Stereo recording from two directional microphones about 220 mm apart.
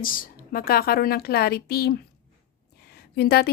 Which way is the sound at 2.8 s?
45° left (ahead or behind).